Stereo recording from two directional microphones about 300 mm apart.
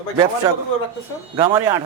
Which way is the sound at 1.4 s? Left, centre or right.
Centre.